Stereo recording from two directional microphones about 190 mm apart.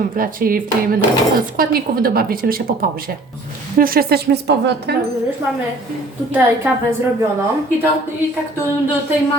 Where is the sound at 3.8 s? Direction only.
50° right (ahead or behind).